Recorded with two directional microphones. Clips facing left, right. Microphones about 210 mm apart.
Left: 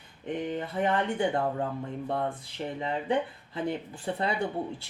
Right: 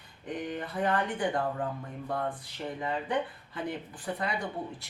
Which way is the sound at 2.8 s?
25° left (ahead or behind).